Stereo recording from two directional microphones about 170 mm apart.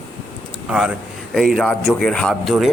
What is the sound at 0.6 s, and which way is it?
A man's voice, 5° right (ahead or behind).